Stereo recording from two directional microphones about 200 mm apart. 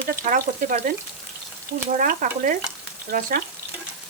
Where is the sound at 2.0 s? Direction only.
40° right (ahead or behind).